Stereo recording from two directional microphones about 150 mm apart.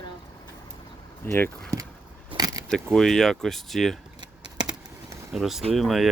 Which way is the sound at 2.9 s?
5° left (ahead or behind).